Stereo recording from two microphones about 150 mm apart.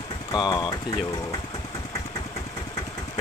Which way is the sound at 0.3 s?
30° left (ahead or behind).